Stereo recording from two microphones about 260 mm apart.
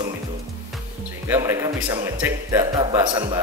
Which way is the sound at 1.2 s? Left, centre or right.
Centre.